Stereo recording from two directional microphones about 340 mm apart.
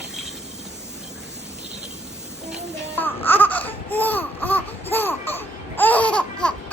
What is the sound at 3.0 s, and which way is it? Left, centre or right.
Baby cry, centre.